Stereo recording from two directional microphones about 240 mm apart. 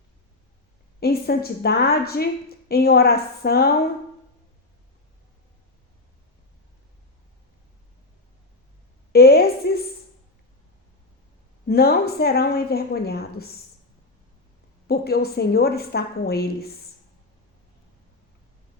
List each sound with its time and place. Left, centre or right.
0.9 s a woman's voice: left
9.1 s a sound: left
11.7 s a woman's voice: left
14.8 s a woman's voice: left